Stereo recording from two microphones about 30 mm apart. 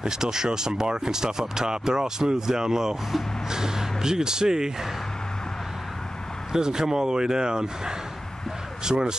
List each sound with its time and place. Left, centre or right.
0.0 s speech: right
6.5 s speech: right